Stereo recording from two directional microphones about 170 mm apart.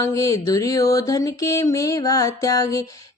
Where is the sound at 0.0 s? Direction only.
20° left (ahead or behind).